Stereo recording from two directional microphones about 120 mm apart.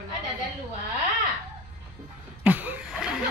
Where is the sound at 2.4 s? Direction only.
15° right (ahead or behind).